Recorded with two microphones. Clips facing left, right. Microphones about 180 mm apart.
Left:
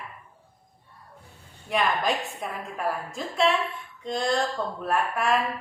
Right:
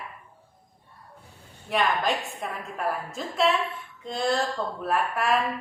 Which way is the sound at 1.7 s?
Centre (ahead or behind).